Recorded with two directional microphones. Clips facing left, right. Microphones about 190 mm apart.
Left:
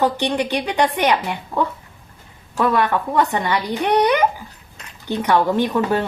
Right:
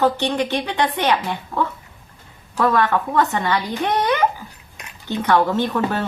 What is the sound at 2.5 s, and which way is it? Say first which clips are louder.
Speech: even; 15° left (ahead or behind).